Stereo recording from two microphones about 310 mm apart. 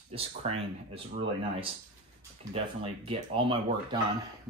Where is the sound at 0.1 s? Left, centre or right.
Centre.